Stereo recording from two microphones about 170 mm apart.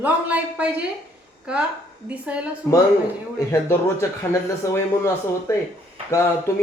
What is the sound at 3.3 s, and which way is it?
Speech, 15° left (ahead or behind).